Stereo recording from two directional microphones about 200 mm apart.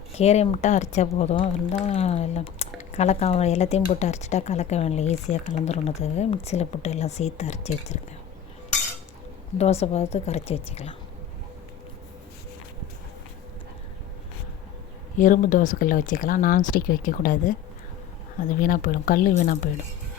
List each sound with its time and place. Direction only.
0.2 s speech: 30° left (ahead or behind)
9.8 s speech: 30° left (ahead or behind)
15.2 s speech: 40° left (ahead or behind)
18.6 s speech: 45° left (ahead or behind)